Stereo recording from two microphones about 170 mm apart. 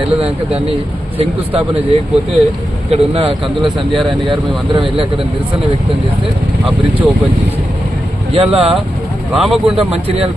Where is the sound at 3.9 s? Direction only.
Centre (ahead or behind).